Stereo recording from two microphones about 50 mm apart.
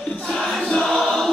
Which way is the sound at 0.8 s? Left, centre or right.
Centre.